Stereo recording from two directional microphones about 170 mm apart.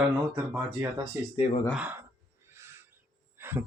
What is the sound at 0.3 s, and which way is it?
Speech, 15° right (ahead or behind).